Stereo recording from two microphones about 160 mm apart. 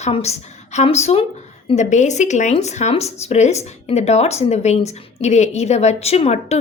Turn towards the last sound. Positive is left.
turn(degrees=40)  # may be behind; listen again after turning